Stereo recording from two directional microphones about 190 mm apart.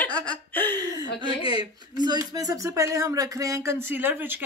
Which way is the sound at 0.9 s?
20° right (ahead or behind).